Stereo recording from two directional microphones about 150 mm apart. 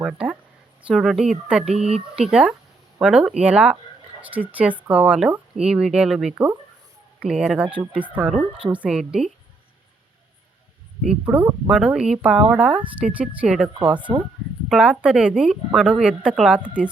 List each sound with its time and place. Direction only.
0.0 s speech: 5° right (ahead or behind)
11.3 s speech: 15° right (ahead or behind)
11.7 s speech: 5° right (ahead or behind)